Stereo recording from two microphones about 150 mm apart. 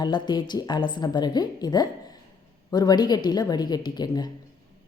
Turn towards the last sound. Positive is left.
turn(degrees=25)  # may be behind; listen again after turning